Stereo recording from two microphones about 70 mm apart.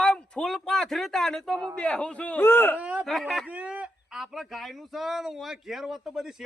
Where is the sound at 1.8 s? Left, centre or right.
Centre.